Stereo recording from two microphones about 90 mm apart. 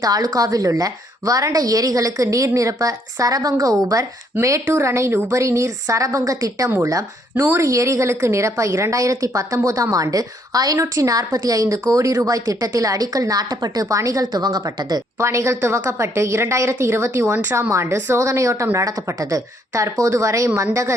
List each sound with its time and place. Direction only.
0.0 s a woman's voice: 45° right (ahead or behind)
6.7 s a woman's voice: 30° right (ahead or behind); by 15.0 s 50° right (ahead or behind)
15.2 s a woman's voice: 35° right (ahead or behind)